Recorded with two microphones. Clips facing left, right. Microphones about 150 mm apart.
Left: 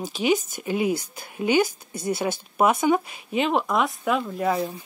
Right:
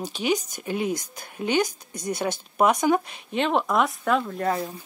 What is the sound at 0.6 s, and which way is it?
Speech, 5° left (ahead or behind).